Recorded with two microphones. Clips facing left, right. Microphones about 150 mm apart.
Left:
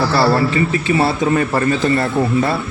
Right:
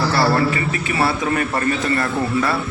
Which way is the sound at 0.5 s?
30° left (ahead or behind).